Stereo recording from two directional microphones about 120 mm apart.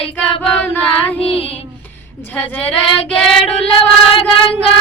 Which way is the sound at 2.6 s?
50° left (ahead or behind).